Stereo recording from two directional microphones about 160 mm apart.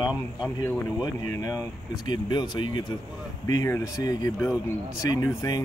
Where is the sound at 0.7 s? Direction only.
20° left (ahead or behind).